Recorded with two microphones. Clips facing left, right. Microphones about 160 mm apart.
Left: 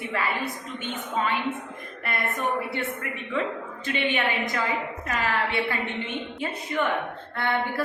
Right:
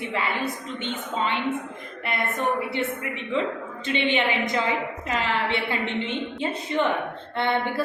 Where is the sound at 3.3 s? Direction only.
25° right (ahead or behind).